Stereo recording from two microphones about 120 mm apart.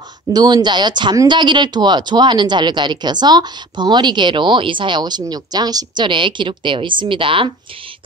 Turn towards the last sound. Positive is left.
turn(degrees=-45)  # may be behind; listen again after turning